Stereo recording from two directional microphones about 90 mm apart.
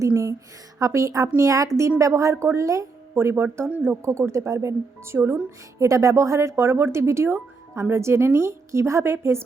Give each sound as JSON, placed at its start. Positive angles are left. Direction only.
{"t": 0.0, "sound": "speech", "side_deg": -35}